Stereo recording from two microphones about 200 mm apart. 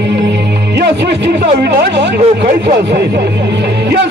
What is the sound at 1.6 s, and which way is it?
Speech, 55° right (ahead or behind).